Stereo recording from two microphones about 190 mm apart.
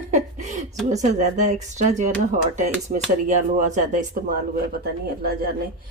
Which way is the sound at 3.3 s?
40° right (ahead or behind).